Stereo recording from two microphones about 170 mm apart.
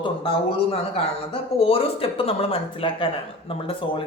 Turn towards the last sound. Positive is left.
turn(degrees=35)  # may be behind; listen again after turning